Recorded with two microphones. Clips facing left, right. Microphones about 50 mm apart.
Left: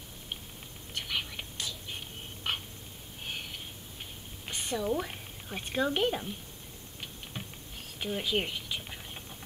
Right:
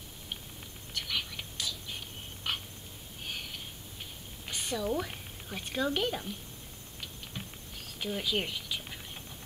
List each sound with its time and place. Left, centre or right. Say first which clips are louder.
0.9 s whispering: left 1 dB; centre
2.4 s a sound: left 1 dB; left
3.3 s wheeze: left 1 dB; centre
4.5 s a woman's voice: left 1 dB; centre
7.3 s a sound: left 1 dB; centre
8.0 s scratch: left 1 dB; centre